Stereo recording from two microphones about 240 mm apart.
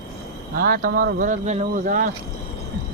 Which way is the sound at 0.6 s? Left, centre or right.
Right.